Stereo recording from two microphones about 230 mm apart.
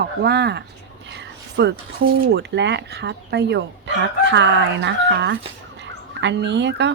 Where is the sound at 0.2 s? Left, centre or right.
Right.